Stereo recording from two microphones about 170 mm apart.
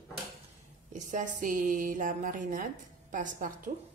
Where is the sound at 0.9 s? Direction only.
50° right (ahead or behind).